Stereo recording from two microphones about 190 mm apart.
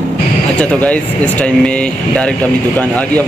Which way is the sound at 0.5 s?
5° left (ahead or behind).